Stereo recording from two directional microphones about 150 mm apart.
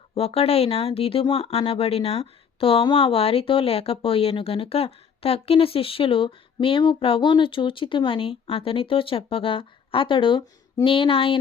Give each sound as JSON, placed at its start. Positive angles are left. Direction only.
{"t": 0.1, "sound": "speech", "side_deg": 40}